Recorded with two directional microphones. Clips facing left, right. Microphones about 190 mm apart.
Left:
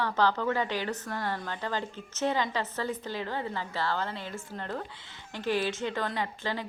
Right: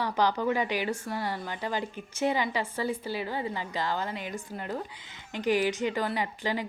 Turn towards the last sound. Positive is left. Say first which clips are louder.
# right 2 dB
turn(degrees=-15)  # may be behind; listen again after turning